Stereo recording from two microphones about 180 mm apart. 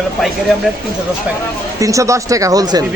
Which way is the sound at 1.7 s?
20° right (ahead or behind).